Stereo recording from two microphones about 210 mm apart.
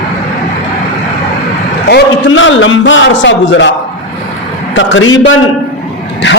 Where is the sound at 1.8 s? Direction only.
55° left (ahead or behind).